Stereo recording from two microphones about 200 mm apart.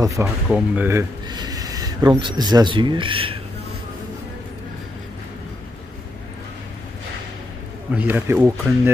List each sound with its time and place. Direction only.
0.0 s a man's voice: 15° right (ahead or behind)
0.5 s speech: 5° right (ahead or behind); by 3.3 s 25° right (ahead or behind)
7.9 s a man's voice: 10° right (ahead or behind)